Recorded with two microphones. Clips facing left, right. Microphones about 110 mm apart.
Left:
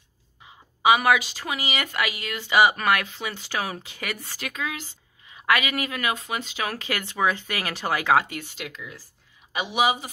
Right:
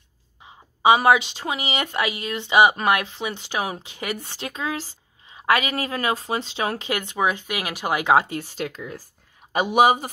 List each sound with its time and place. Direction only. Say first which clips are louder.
0.8 s speech: right 3 dB; 25° right (ahead or behind); by 10.1 s 50° right (ahead or behind)